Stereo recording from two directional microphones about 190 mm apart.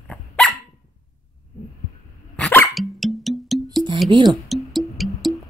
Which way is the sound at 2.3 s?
10° left (ahead or behind).